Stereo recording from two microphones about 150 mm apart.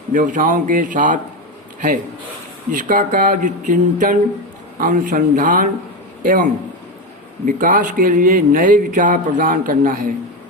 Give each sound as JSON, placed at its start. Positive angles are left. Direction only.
{"t": 0.1, "sound": "a man's voice", "side_deg": -60}
{"t": 2.7, "sound": "a man's voice", "side_deg": -60}